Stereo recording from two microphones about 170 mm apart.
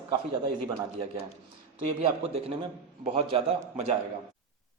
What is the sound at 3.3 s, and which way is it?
Speech, 35° right (ahead or behind).